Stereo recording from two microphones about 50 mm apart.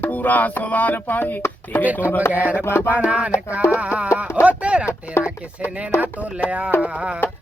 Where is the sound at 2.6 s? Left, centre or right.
Left.